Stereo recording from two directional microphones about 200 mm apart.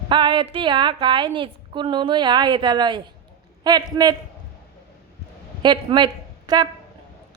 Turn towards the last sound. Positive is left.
turn(degrees=-20)  # may be behind; listen again after turning